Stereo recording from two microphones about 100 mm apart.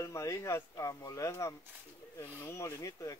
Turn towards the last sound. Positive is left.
turn(degrees=30)  # may be behind; listen again after turning